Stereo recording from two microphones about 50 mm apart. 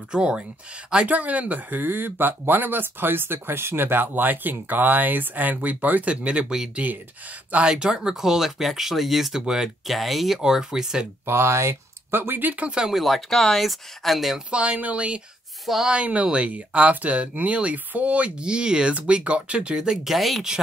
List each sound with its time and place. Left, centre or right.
0.1 s speech: centre; by 6.1 s right
6.2 s speech: right
7.6 s speech: centre
11.2 s speech: right
12.5 s speech: right
12.8 s speech: centre
14.5 s speech: right
15.6 s speech: centre
15.9 s speech: right
18.4 s speech: centre